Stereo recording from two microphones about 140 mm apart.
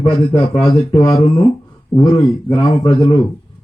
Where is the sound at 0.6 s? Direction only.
35° left (ahead or behind).